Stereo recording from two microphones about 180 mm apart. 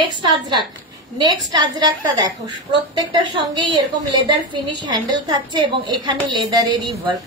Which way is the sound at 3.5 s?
20° right (ahead or behind).